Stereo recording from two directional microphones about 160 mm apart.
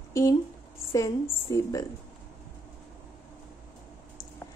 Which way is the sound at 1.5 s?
20° left (ahead or behind).